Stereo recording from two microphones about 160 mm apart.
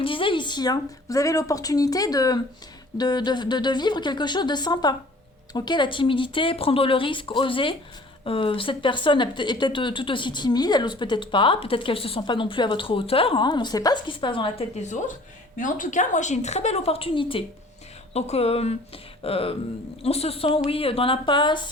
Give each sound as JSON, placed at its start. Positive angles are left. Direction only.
{"t": 0.0, "sound": "speech", "side_deg": 35}
{"t": 14.8, "sound": "a woman's voice", "side_deg": 50}